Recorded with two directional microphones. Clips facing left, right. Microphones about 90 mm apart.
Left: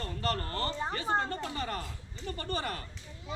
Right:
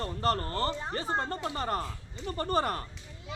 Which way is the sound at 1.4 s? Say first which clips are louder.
Right 4 dB; 35° right (ahead or behind).